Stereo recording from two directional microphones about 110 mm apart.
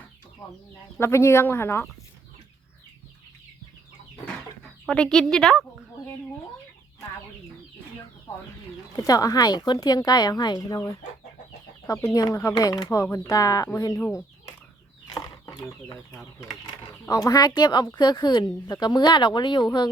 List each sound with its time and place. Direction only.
0.9 s speech: 25° left (ahead or behind)
4.9 s a woman's voice: 5° left (ahead or behind)
9.0 s speech: 35° left (ahead or behind)
12.1 s speech: 30° left (ahead or behind)
14.1 s chicken: 30° left (ahead or behind)
17.1 s speech: 35° left (ahead or behind)